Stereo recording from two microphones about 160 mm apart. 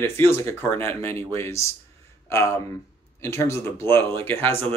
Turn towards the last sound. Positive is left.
turn(degrees=10)  # may be behind; listen again after turning